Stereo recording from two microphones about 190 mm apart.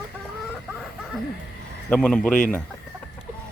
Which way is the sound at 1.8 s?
5° left (ahead or behind).